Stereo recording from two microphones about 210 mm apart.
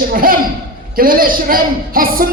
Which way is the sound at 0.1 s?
45° right (ahead or behind).